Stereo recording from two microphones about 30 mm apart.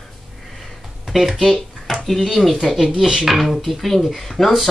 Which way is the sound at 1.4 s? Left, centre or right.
Centre.